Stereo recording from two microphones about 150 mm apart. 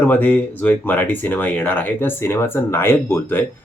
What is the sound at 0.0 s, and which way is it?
Speech, 10° left (ahead or behind).